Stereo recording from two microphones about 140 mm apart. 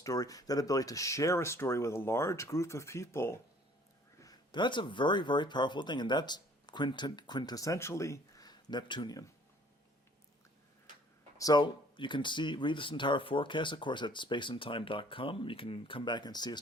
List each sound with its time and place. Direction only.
0.0 s speech: 25° left (ahead or behind)
4.2 s speech: 30° left (ahead or behind)
11.3 s speech: 30° left (ahead or behind)